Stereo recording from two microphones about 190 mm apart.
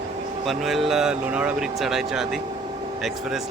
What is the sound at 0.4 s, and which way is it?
Speech, centre (ahead or behind).